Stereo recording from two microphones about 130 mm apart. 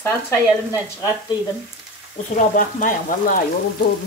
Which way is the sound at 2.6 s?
90° left.